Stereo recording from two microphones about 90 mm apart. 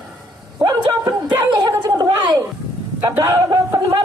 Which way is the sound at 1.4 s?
45° right (ahead or behind).